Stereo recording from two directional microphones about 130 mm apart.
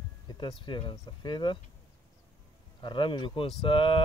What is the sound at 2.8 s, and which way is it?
Speech, 40° left (ahead or behind).